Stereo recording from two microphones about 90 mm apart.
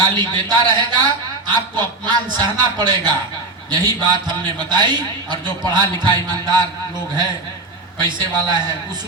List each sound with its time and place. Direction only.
0.2 s a man's voice: 55° right (ahead or behind)
6.1 s a sound: 50° right (ahead or behind)
7.9 s a man's voice: 55° right (ahead or behind)